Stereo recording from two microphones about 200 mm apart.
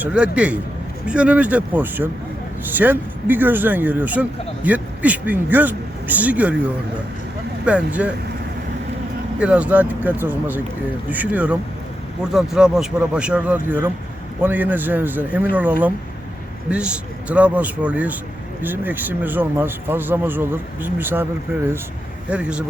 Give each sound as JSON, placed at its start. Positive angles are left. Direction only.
{"t": 0.0, "sound": "speech", "side_deg": -5}
{"t": 7.6, "sound": "speech", "side_deg": -5}
{"t": 9.4, "sound": "speech", "side_deg": -5}